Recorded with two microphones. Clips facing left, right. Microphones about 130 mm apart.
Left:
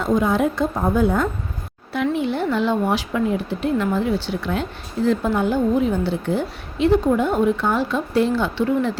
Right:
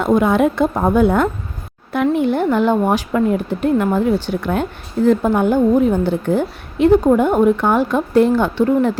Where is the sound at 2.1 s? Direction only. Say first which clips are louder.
Right 6 dB; 50° right (ahead or behind).